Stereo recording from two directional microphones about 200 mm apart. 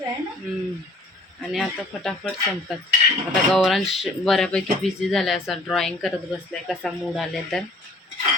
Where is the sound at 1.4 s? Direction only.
Centre (ahead or behind).